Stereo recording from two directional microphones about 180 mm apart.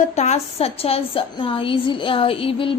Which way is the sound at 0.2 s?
35° left (ahead or behind).